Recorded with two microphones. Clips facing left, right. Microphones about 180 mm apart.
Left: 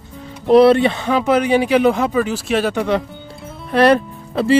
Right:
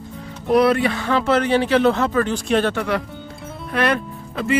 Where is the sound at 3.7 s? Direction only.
35° left (ahead or behind).